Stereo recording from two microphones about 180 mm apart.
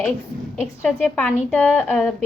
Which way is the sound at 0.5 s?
10° left (ahead or behind).